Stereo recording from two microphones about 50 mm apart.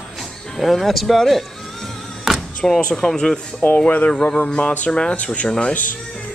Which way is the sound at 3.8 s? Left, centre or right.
Left.